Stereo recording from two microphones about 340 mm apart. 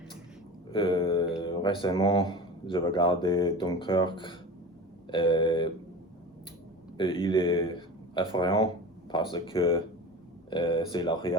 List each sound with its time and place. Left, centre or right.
0.7 s speech: centre
6.9 s speech: centre